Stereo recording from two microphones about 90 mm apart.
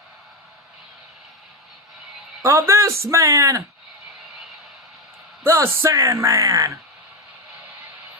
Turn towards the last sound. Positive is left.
turn(degrees=-35)  # may be behind; listen again after turning